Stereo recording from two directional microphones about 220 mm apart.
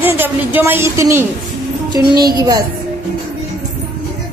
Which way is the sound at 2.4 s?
20° right (ahead or behind).